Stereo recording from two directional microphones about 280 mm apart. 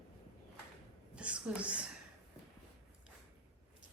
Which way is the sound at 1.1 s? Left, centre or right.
Centre.